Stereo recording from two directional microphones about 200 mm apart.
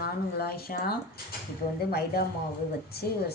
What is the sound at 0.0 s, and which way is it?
A woman's voice, 50° left (ahead or behind).